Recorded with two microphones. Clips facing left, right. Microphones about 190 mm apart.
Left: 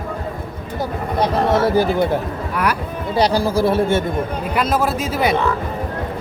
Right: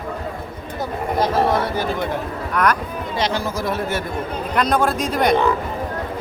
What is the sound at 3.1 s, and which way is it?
Speech, 35° left (ahead or behind).